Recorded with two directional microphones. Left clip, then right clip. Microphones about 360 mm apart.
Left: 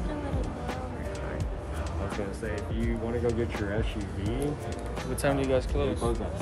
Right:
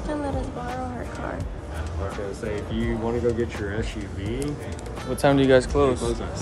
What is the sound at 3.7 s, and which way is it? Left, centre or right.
Speech, centre.